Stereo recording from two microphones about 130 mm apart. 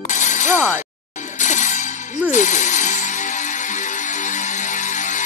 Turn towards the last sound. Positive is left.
turn(degrees=70)  # may be behind; listen again after turning